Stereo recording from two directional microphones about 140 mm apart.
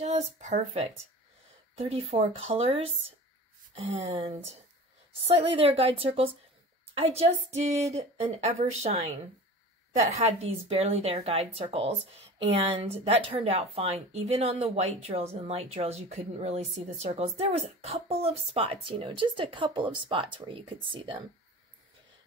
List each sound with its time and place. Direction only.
0.0 s speech: 55° right (ahead or behind)
1.8 s speech: 40° right (ahead or behind)